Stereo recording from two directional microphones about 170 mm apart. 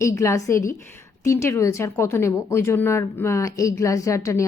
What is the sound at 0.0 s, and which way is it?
A woman's voice, 15° left (ahead or behind).